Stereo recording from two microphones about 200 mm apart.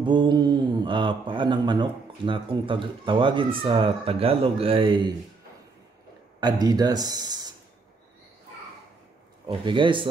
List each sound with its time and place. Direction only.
0.0 s speech: 25° right (ahead or behind)
6.4 s speech: 20° right (ahead or behind)
9.5 s speech: 25° right (ahead or behind)